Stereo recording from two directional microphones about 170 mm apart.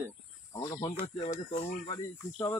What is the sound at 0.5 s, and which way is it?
Speech, 25° left (ahead or behind).